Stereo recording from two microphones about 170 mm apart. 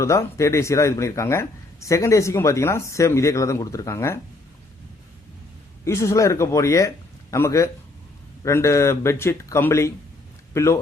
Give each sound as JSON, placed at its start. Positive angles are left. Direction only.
{"t": 0.0, "sound": "speech", "side_deg": 15}
{"t": 5.8, "sound": "a man's voice", "side_deg": 15}